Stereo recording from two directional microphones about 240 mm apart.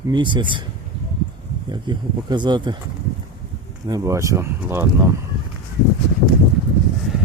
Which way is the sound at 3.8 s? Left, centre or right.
Centre.